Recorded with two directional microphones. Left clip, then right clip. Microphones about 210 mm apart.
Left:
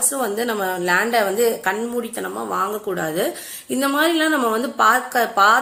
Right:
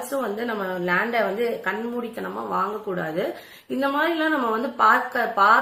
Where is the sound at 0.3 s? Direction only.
50° left (ahead or behind).